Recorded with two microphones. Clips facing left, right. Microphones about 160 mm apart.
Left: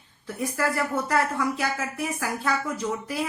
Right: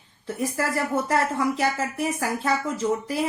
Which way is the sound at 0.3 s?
20° right (ahead or behind).